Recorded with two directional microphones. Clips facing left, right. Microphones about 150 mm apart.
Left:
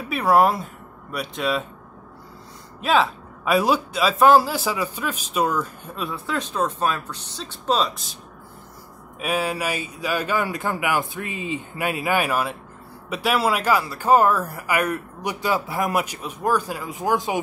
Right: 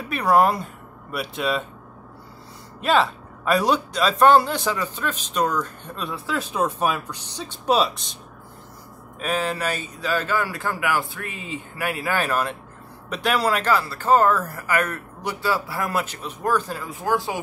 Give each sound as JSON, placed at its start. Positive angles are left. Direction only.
{"t": 0.0, "sound": "speech", "side_deg": 0}
{"t": 2.8, "sound": "speech", "side_deg": 0}
{"t": 6.5, "sound": "speech", "side_deg": -10}
{"t": 7.9, "sound": "speech", "side_deg": 0}
{"t": 9.2, "sound": "speech", "side_deg": 10}